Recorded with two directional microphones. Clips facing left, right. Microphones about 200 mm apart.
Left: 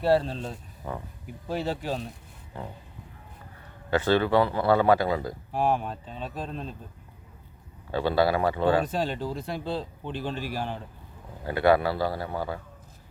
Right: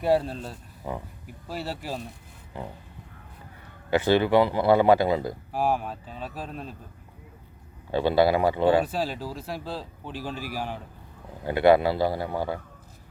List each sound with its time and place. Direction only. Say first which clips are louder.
0.0 s speech: even; 10° right (ahead or behind)
1.5 s speech: left 4 dB; 5° right (ahead or behind)
3.9 s speech: right 2 dB; 15° right (ahead or behind)
5.5 s speech: left 1 dB; 5° right (ahead or behind)
7.9 s speech: right 3 dB; 20° right (ahead or behind)
8.8 s speech: even; 5° right (ahead or behind)
11.4 s speech: right 3 dB; 20° right (ahead or behind)